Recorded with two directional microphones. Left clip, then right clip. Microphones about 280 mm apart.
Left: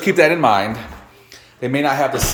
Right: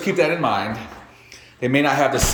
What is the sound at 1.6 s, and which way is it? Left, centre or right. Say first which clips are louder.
Speech: even; centre.